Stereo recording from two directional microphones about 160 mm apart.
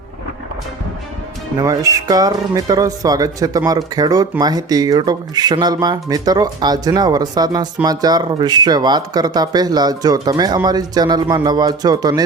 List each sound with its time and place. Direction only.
1.5 s speech: 20° right (ahead or behind)